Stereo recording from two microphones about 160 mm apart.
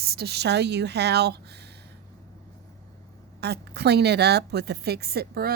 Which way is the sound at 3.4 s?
90° right.